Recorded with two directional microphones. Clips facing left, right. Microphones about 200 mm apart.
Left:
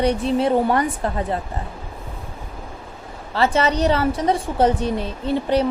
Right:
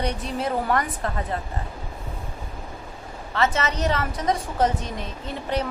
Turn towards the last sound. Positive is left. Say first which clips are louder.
# left 8 dB
turn(degrees=30)  # may be behind; listen again after turning